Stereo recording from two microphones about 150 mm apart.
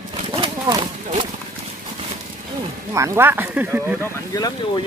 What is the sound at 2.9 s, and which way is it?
Speech, 20° right (ahead or behind).